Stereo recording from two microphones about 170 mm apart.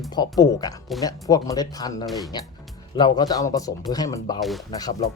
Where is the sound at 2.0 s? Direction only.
Centre (ahead or behind).